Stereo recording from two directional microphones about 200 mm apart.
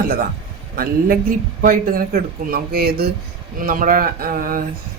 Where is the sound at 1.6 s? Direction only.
45° right (ahead or behind).